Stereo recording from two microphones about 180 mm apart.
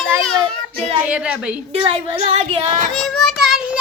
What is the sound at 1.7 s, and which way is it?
A woman's voice, 30° right (ahead or behind).